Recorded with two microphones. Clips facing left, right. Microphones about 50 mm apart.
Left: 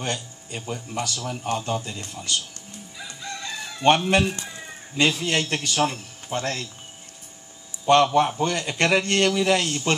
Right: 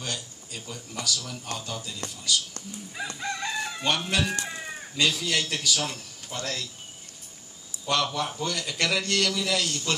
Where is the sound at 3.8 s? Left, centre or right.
Left.